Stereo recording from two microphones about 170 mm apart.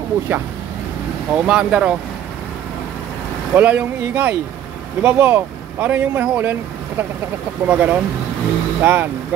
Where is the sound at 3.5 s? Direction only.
10° right (ahead or behind).